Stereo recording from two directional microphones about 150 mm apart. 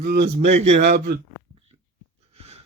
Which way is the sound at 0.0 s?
90° right.